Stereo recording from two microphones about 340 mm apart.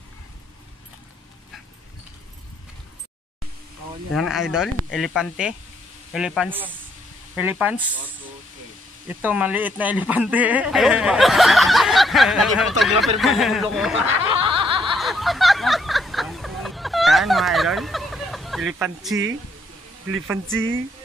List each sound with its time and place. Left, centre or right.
4.1 s speech: centre
9.2 s speech: centre
14.4 s snicker: centre
15.0 s a sound: centre
18.8 s speech: centre
20.5 s speech: right